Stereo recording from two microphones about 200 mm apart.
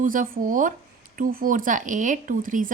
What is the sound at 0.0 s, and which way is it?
Speech, 45° right (ahead or behind).